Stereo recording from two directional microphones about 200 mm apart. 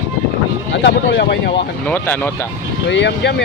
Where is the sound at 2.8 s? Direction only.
60° left (ahead or behind).